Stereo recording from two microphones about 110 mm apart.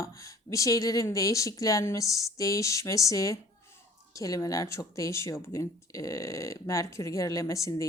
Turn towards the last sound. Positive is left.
turn(degrees=30)  # may be behind; listen again after turning